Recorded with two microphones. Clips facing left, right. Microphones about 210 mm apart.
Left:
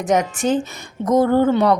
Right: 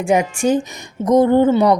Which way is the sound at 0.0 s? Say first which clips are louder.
Right 2 dB; 10° right (ahead or behind).